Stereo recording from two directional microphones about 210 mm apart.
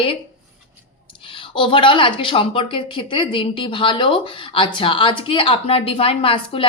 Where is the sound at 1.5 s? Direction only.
25° left (ahead or behind).